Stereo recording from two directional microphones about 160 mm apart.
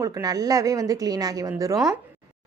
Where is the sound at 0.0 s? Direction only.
20° right (ahead or behind).